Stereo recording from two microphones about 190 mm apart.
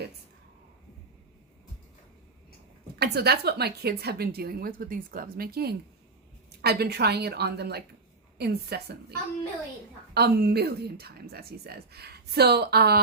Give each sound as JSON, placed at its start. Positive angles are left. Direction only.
{"t": 2.9, "sound": "a woman's voice", "side_deg": -55}
{"t": 10.2, "sound": "a woman's voice", "side_deg": -55}